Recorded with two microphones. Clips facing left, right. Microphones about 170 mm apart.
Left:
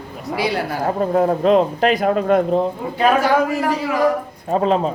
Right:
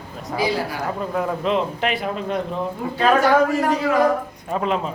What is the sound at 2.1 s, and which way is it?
Speech, 55° left (ahead or behind).